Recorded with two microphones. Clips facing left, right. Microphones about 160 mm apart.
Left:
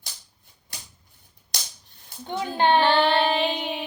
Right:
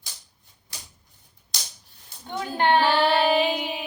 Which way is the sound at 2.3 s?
20° left (ahead or behind).